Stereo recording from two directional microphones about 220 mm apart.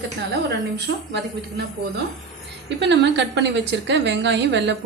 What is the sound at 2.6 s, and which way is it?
A woman's voice, 55° right (ahead or behind).